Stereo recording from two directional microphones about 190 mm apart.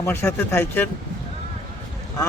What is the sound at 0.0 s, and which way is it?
Speech, 10° left (ahead or behind).